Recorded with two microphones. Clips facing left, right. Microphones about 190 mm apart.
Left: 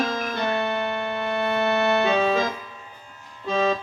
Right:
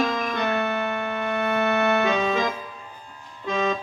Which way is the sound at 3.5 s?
35° left (ahead or behind).